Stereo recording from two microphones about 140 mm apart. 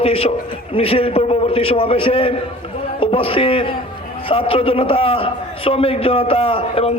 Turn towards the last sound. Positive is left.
turn(degrees=40)  # may be behind; listen again after turning